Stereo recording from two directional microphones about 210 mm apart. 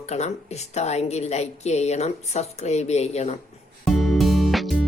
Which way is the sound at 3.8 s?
Centre (ahead or behind).